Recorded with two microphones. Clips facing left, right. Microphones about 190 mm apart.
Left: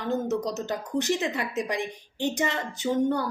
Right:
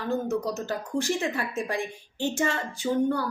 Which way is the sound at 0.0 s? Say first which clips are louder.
Even; 20° left (ahead or behind).